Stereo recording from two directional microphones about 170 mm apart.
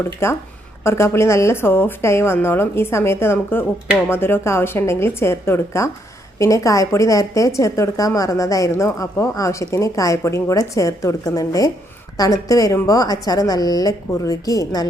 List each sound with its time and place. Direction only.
0.0 s a woman's voice: 15° left (ahead or behind)